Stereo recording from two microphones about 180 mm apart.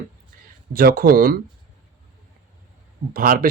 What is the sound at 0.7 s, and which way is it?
Speech, 55° right (ahead or behind).